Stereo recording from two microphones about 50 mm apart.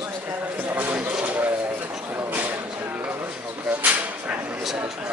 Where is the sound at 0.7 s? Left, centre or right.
Right.